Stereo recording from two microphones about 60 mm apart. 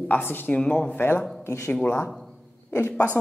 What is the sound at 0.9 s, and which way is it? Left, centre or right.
Speech, left.